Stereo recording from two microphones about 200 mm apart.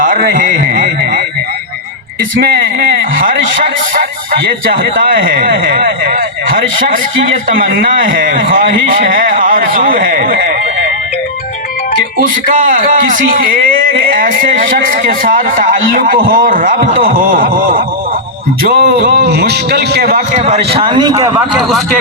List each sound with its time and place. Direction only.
0.0 s a sound: 45° right (ahead or behind)
2.4 s a man's voice: 50° right (ahead or behind)
7.5 s a man's voice: 45° right (ahead or behind)
12.5 s a man's voice: 45° right (ahead or behind)
20.7 s a man's voice: 25° right (ahead or behind)